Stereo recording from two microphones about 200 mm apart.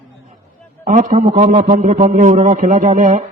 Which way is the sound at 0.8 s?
40° right (ahead or behind).